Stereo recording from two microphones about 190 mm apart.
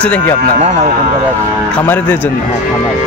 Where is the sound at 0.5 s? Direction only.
35° right (ahead or behind).